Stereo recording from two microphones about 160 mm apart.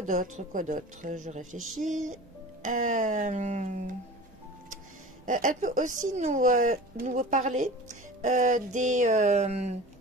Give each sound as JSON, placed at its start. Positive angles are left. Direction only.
{"t": 0.0, "sound": "speech", "side_deg": -55}
{"t": 5.2, "sound": "speech", "side_deg": -55}